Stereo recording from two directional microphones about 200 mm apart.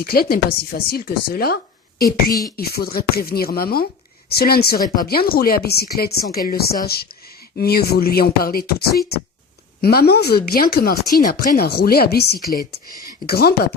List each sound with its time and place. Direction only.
0.0 s speech: 50° left (ahead or behind)
2.6 s speech: 50° left (ahead or behind)